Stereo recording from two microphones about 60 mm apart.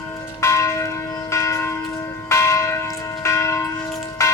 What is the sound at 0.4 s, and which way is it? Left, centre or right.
Church bell, left.